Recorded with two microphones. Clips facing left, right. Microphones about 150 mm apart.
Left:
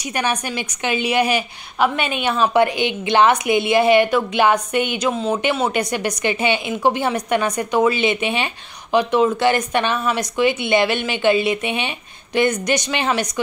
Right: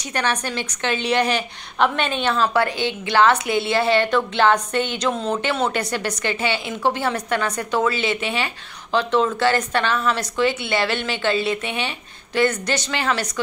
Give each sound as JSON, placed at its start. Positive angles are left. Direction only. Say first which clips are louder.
{"t": 0.1, "sound": "a woman's voice", "louder": "left 1 dB", "side_deg": 10}